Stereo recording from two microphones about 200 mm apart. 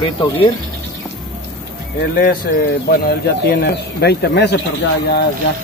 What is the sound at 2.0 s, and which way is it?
Speech, 45° left (ahead or behind).